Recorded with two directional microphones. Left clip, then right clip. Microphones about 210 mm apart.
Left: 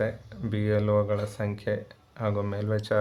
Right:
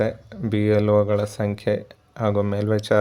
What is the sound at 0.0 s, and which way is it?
Speech, 35° right (ahead or behind).